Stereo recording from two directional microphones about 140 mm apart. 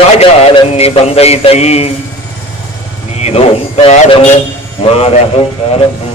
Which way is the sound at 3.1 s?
50° left (ahead or behind).